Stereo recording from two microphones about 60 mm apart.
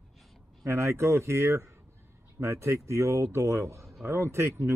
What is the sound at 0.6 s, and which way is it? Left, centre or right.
A man's voice, right.